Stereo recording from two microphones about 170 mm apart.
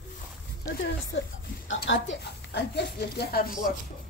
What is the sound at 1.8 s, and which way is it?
Speech, 85° left.